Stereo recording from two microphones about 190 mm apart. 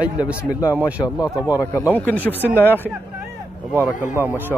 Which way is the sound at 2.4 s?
10° right (ahead or behind).